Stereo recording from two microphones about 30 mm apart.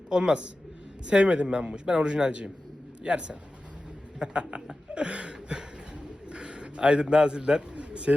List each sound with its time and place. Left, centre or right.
0.1 s speech: right
1.2 s a man's voice: right
7.9 s a sound: right